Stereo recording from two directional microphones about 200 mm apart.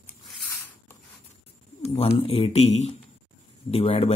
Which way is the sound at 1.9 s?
30° left (ahead or behind).